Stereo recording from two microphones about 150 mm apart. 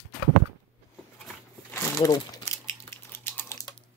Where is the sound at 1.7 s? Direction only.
20° left (ahead or behind).